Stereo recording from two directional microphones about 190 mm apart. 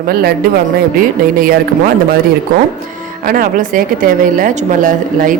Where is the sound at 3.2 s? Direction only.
50° right (ahead or behind).